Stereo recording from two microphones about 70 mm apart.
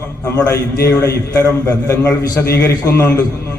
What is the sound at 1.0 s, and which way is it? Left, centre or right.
A man's voice, left.